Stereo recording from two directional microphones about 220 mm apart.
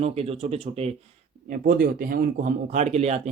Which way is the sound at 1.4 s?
40° right (ahead or behind).